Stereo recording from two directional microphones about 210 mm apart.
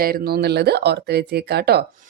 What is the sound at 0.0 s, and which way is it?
A woman's voice, 45° right (ahead or behind).